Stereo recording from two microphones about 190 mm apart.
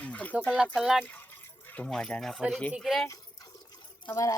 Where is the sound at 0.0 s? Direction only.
5° left (ahead or behind).